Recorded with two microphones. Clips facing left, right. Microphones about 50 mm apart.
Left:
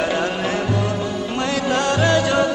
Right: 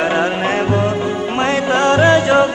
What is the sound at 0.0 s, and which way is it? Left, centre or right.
Music, right.